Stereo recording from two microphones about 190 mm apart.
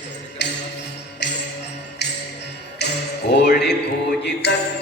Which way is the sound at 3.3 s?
60° left (ahead or behind).